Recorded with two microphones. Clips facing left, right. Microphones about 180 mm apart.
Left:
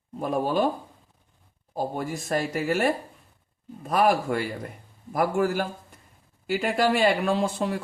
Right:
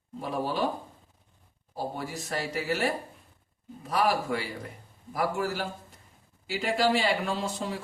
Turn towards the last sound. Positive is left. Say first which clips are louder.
# left 7 dB
turn(degrees=60)  # may be behind; listen again after turning